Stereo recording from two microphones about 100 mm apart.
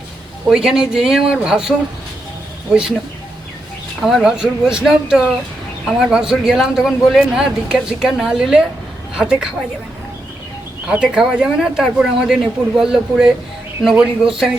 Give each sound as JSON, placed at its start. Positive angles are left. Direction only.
{"t": 0.5, "sound": "a man's voice", "side_deg": -5}
{"t": 4.0, "sound": "a man's voice", "side_deg": -5}
{"t": 10.8, "sound": "a man's voice", "side_deg": -10}